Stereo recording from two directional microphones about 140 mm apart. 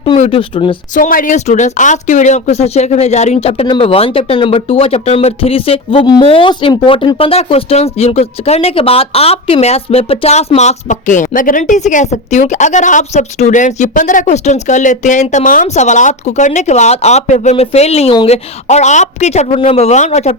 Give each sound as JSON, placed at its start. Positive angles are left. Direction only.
{"t": 0.2, "sound": "speech", "side_deg": 45}
{"t": 0.9, "sound": "speech", "side_deg": 70}
{"t": 15.6, "sound": "speech", "side_deg": 55}